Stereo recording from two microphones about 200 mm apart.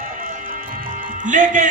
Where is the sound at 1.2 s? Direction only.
40° right (ahead or behind).